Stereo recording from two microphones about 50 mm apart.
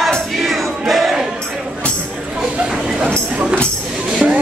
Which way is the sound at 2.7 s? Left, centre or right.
Centre.